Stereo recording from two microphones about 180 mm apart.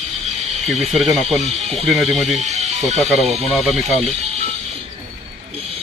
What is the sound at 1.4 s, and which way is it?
Speech, 35° right (ahead or behind).